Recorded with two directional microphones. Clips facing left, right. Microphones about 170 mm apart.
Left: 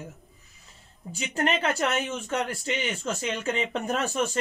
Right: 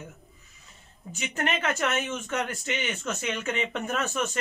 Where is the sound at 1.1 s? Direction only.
35° left (ahead or behind).